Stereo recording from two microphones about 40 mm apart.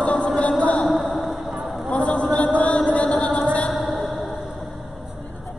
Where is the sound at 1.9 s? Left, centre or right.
Left.